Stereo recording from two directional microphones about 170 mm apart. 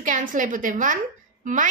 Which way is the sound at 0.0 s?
50° right (ahead or behind).